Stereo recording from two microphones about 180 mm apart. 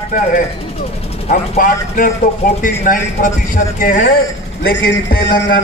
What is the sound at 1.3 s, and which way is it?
A man's voice, 50° left (ahead or behind).